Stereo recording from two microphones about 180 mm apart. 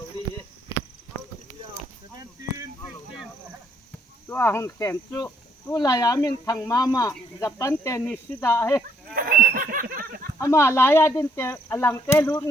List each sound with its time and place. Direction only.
4.3 s speech: 10° left (ahead or behind)
9.1 s a sound: 50° right (ahead or behind)
10.4 s speech: 15° left (ahead or behind)